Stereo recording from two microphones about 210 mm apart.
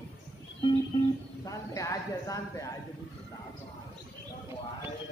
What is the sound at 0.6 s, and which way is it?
Guitar, 20° left (ahead or behind).